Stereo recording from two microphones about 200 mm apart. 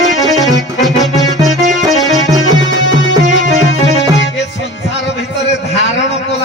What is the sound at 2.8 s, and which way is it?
Music, 65° left (ahead or behind).